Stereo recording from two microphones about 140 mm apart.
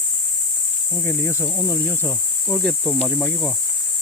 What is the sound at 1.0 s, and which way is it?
Speech, 20° left (ahead or behind).